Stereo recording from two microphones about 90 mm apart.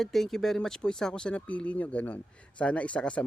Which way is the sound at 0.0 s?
Centre (ahead or behind).